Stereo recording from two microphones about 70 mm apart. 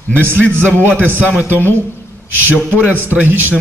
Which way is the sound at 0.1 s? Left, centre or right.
Right.